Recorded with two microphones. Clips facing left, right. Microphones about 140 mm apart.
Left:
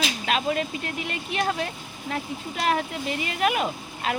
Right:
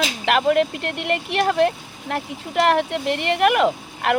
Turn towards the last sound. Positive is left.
turn(degrees=-65)  # may be behind; listen again after turning